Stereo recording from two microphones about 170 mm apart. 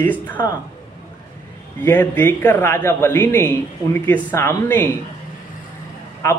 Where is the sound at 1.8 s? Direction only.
10° left (ahead or behind).